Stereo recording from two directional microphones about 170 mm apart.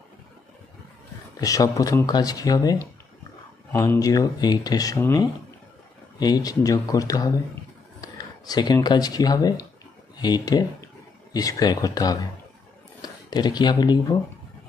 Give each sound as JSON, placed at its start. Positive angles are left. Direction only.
{"t": 1.4, "sound": "speech", "side_deg": 20}